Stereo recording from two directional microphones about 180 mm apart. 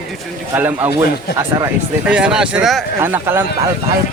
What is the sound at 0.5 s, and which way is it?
Speech, 10° right (ahead or behind).